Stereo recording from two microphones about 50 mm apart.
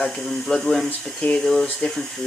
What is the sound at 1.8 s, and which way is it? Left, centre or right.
Speech, left.